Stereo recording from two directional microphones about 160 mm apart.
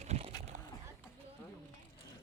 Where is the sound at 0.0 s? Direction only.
45° right (ahead or behind).